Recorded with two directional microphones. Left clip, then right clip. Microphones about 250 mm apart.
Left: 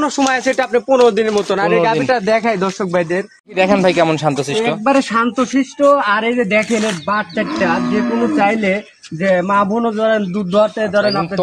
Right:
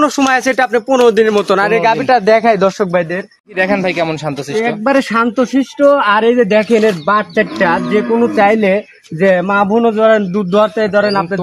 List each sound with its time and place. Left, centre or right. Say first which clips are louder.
0.0 s speech: right 4 dB; right
3.5 s speech: left 1 dB; centre
4.8 s speech: right 2 dB; right